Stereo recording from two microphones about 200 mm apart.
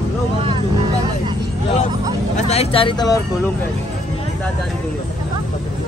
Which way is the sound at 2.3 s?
30° left (ahead or behind).